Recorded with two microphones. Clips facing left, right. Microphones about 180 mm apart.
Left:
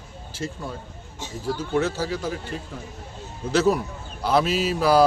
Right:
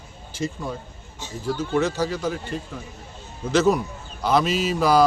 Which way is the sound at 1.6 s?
5° left (ahead or behind).